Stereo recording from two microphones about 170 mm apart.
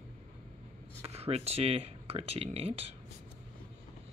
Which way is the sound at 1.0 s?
35° right (ahead or behind).